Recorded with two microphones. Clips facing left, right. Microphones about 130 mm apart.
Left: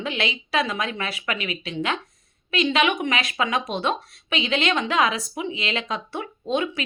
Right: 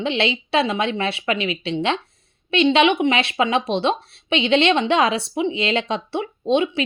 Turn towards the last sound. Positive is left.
turn(degrees=-25)  # may be behind; listen again after turning